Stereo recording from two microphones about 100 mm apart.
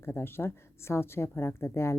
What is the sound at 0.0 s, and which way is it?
Speech, 25° left (ahead or behind).